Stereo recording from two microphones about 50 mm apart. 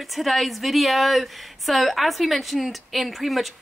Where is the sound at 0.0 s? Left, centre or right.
Centre.